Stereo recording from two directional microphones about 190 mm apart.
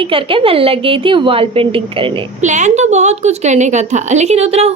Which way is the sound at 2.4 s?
40° right (ahead or behind).